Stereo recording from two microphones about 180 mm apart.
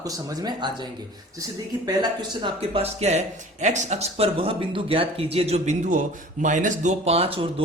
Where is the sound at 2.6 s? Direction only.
35° right (ahead or behind).